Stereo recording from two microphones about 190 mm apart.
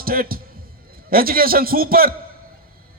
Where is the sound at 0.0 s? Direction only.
50° right (ahead or behind).